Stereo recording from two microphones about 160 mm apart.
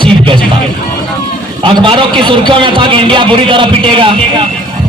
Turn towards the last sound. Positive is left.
turn(degrees=-30)  # may be behind; listen again after turning